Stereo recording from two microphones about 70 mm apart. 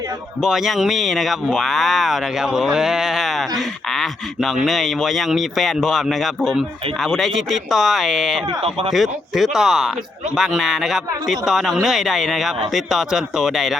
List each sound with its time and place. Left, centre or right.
0.4 s speech: centre